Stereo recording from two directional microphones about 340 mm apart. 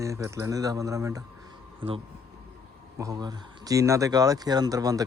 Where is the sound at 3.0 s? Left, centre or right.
Centre.